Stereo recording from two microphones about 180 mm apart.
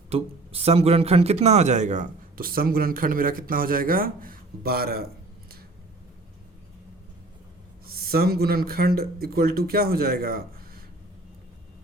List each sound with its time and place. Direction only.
0.1 s speech: 35° right (ahead or behind); by 5.0 s 60° right (ahead or behind)
7.9 s speech: 55° right (ahead or behind)